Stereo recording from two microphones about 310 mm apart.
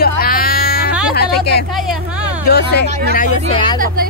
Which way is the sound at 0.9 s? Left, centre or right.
Centre.